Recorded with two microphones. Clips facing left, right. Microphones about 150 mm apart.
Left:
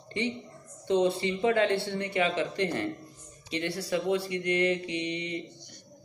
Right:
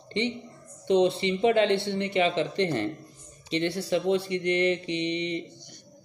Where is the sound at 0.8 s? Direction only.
20° right (ahead or behind).